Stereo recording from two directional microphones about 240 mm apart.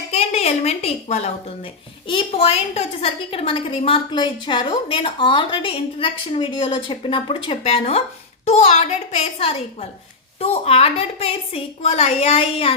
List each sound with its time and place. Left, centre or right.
0.1 s a woman's voice: left